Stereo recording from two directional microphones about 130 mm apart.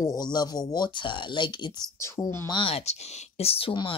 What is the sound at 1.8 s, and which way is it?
Speech, 25° left (ahead or behind).